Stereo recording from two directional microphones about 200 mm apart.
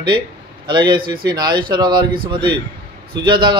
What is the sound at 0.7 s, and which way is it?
A man's voice, 25° right (ahead or behind).